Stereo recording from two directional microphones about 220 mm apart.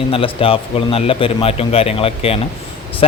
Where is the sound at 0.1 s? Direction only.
25° left (ahead or behind).